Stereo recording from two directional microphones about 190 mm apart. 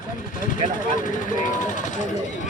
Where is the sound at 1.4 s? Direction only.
40° left (ahead or behind).